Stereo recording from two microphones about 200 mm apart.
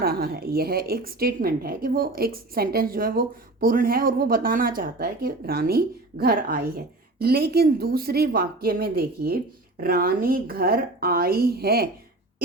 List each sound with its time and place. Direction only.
0.0 s a woman's voice: 50° right (ahead or behind)